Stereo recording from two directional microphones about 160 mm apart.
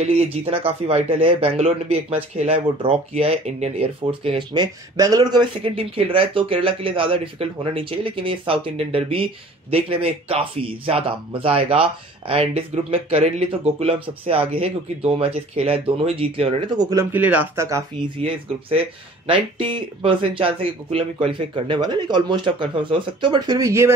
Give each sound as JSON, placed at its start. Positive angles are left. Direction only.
{"t": 0.0, "sound": "speech", "side_deg": -35}
{"t": 16.9, "sound": "speech", "side_deg": -15}
{"t": 19.2, "sound": "speech", "side_deg": -35}